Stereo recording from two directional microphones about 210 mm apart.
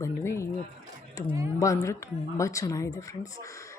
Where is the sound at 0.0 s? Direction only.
15° left (ahead or behind).